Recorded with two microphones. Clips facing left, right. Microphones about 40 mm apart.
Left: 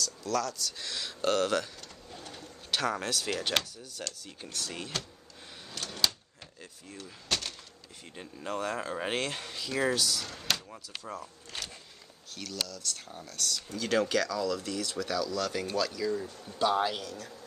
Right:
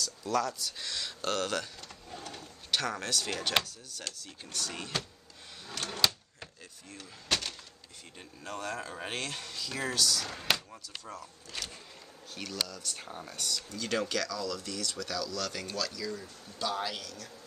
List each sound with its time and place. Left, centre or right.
0.0 s speech: centre
0.8 s speech: centre
2.0 s bird: centre
2.8 s speech: centre
6.9 s speech: centre
8.2 s speech: centre
10.2 s speech: centre
10.7 s speech: centre
12.4 s speech: centre
13.5 s speech: centre